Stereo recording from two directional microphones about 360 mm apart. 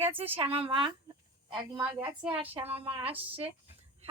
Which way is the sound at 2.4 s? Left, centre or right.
Centre.